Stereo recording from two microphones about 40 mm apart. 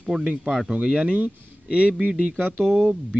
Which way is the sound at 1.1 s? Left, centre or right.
Right.